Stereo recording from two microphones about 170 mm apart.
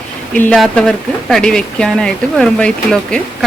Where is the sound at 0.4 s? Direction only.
Centre (ahead or behind).